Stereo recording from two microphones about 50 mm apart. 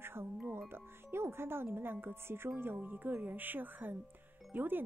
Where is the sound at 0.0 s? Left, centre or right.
Right.